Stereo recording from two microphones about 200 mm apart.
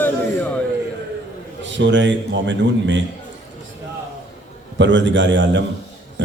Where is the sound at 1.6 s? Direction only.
65° right (ahead or behind).